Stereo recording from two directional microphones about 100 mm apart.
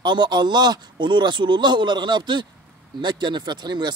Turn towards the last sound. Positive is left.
turn(degrees=-45)  # may be behind; listen again after turning